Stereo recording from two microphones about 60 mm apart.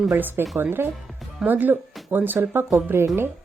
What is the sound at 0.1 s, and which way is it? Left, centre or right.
A woman's voice, right.